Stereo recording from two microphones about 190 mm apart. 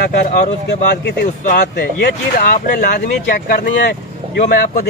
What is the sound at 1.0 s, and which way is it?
Speech, 50° left (ahead or behind).